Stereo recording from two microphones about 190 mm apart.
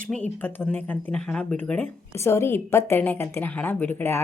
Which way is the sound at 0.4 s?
10° left (ahead or behind).